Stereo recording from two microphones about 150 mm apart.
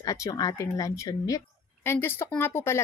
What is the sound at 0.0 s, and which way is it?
A woman's voice, 25° left (ahead or behind).